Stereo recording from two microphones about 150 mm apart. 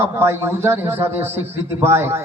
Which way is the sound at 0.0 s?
15° right (ahead or behind).